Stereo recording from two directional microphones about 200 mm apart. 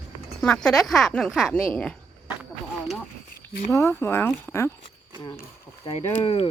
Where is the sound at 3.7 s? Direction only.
15° left (ahead or behind).